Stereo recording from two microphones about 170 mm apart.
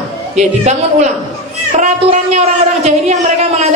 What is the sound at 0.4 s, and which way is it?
A woman's voice, 45° right (ahead or behind).